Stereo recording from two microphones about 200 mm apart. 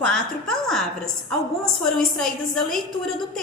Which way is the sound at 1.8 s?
Centre (ahead or behind).